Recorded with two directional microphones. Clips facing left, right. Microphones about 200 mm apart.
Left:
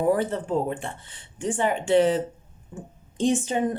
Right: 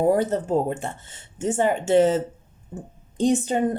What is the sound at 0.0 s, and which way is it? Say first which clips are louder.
A woman's voice: right 3 dB; 40° right (ahead or behind).